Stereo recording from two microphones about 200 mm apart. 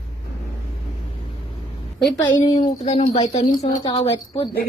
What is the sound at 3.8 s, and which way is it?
Speech, 20° left (ahead or behind).